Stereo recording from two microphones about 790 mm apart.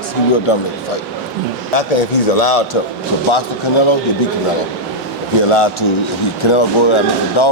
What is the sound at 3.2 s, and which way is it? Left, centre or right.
Speech, left.